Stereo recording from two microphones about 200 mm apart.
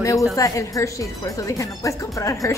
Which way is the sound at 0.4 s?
15° left (ahead or behind).